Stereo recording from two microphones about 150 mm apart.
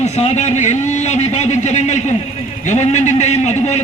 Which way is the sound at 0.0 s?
50° left (ahead or behind).